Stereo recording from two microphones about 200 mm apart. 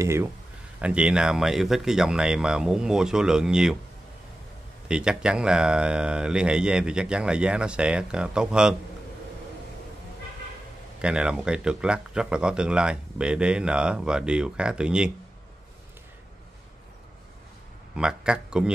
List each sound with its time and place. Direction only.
0.0 s speech: 15° right (ahead or behind)
4.8 s speech: 5° right (ahead or behind)
11.0 s speech: 5° right (ahead or behind)
17.9 s speech: 5° right (ahead or behind)